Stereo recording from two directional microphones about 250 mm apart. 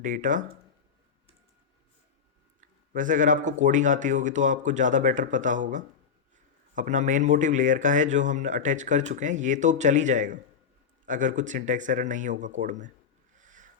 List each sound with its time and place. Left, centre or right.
0.0 s speech: right
2.6 s a man's voice: right
13.4 s boat: right